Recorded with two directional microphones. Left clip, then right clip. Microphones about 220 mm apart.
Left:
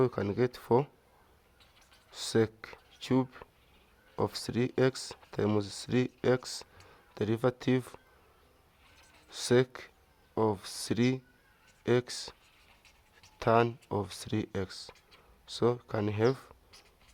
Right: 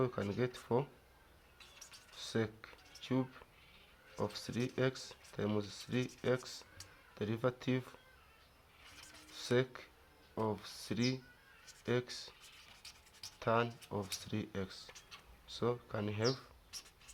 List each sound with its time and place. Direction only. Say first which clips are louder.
0.0 s speech: left 8 dB; 50° left (ahead or behind)
2.1 s speech: left 10 dB; 50° left (ahead or behind)
9.3 s speech: left 8 dB; 50° left (ahead or behind)
13.4 s speech: left 8 dB; 50° left (ahead or behind)